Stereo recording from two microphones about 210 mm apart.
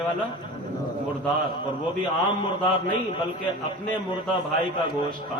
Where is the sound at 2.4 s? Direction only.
20° left (ahead or behind).